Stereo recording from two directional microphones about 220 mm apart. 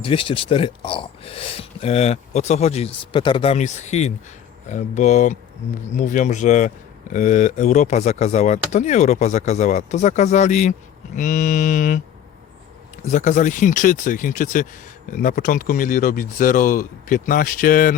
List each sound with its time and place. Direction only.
0.0 s speech: 25° left (ahead or behind)
13.1 s speech: 35° left (ahead or behind)